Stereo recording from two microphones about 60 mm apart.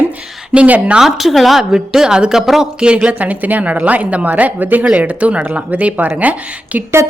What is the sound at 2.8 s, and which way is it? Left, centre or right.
Speech, centre.